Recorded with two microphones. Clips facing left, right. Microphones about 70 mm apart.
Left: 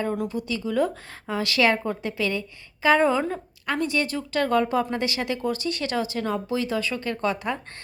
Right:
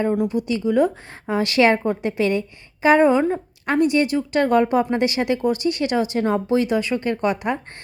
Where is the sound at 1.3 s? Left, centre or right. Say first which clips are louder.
Right 5 dB; right.